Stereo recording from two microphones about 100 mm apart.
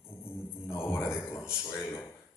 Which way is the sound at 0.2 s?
25° left (ahead or behind).